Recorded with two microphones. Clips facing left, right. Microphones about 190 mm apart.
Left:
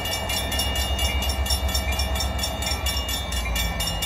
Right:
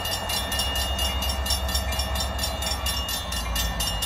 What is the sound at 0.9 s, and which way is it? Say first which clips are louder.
Train: left 2 dB; 40° right (ahead or behind).